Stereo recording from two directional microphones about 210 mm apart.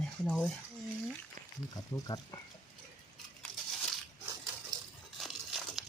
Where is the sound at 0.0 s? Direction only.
Centre (ahead or behind).